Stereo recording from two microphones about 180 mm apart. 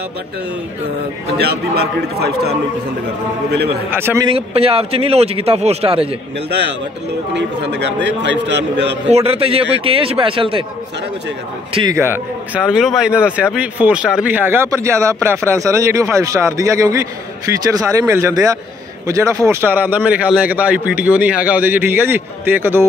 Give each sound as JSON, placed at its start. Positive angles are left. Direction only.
{"t": 1.4, "sound": "a man's voice", "side_deg": -60}
{"t": 3.9, "sound": "a man's voice", "side_deg": -15}
{"t": 4.3, "sound": "speech", "side_deg": -30}
{"t": 7.3, "sound": "a man's voice", "side_deg": -75}
{"t": 9.1, "sound": "speech", "side_deg": -35}
{"t": 11.9, "sound": "a man's voice", "side_deg": -10}